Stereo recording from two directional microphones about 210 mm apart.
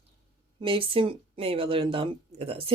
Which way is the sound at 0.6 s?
25° right (ahead or behind).